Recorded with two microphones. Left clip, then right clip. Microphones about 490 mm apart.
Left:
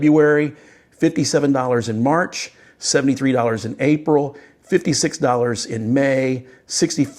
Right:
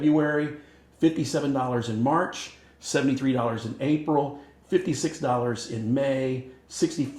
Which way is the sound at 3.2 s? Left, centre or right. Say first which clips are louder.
Left 8 dB; left.